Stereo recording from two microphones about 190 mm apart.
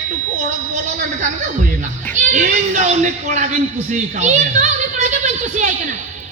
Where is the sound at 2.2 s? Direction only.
40° right (ahead or behind).